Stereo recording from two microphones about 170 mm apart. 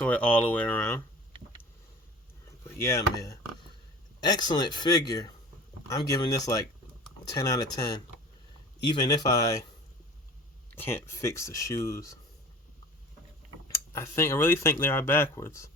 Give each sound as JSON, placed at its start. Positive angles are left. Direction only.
{"t": 0.0, "sound": "speech", "side_deg": 10}
{"t": 2.6, "sound": "speech", "side_deg": 15}
{"t": 10.7, "sound": "speech", "side_deg": 10}
{"t": 13.7, "sound": "speech", "side_deg": 15}